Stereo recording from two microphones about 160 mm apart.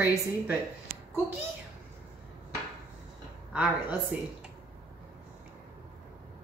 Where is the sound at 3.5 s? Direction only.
10° right (ahead or behind).